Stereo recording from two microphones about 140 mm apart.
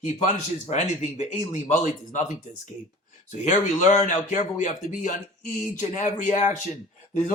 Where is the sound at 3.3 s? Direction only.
60° left (ahead or behind).